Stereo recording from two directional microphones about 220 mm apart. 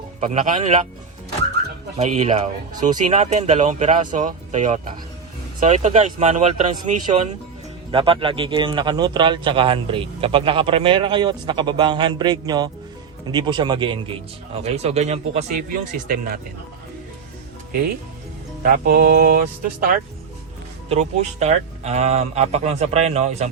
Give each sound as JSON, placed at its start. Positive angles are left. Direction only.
{"t": 0.2, "sound": "a man's voice", "side_deg": -35}
{"t": 2.0, "sound": "a man's voice", "side_deg": -30}
{"t": 16.0, "sound": "speech", "side_deg": -45}
{"t": 18.6, "sound": "a man's voice", "side_deg": -40}
{"t": 20.9, "sound": "a man's voice", "side_deg": -30}